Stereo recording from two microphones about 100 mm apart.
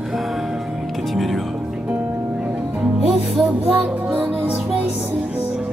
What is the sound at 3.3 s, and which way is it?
Music, centre (ahead or behind).